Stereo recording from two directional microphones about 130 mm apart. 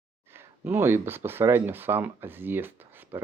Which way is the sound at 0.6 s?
15° right (ahead or behind).